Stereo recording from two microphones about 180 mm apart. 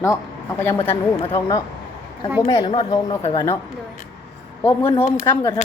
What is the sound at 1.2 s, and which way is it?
A woman's voice, 25° left (ahead or behind).